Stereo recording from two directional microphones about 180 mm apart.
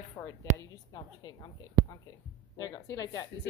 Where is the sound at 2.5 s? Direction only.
20° left (ahead or behind).